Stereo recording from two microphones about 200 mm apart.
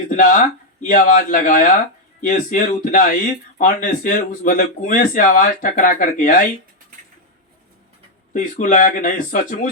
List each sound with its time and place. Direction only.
0.2 s speech: 45° left (ahead or behind)
8.3 s speech: 40° left (ahead or behind)